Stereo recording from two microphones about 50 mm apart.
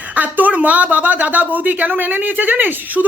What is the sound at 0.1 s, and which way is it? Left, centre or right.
Speech, right.